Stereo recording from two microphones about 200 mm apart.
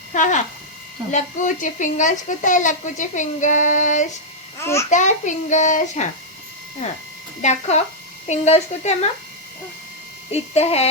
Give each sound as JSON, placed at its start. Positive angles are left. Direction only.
{"t": 0.1, "sound": "speech", "side_deg": 40}
{"t": 4.6, "sound": "a child's voice", "side_deg": 15}
{"t": 4.9, "sound": "speech", "side_deg": 35}
{"t": 7.4, "sound": "speech", "side_deg": 35}
{"t": 10.3, "sound": "speech", "side_deg": 30}